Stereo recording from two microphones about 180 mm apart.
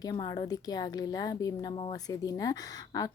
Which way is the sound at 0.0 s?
20° left (ahead or behind).